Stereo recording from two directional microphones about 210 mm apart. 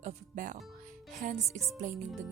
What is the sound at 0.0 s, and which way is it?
Music, 40° right (ahead or behind).